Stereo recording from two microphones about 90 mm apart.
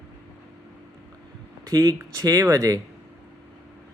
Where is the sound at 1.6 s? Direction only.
40° right (ahead or behind).